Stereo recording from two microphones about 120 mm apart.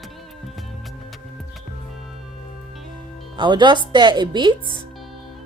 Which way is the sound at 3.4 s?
40° right (ahead or behind).